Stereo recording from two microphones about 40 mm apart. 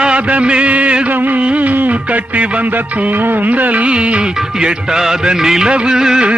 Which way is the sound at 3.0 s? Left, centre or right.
Right.